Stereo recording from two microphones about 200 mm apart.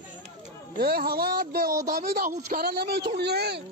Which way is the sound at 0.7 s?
50° right (ahead or behind).